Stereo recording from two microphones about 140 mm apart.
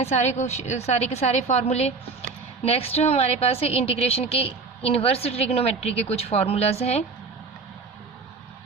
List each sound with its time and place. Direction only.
0.0 s a woman's voice: 50° left (ahead or behind)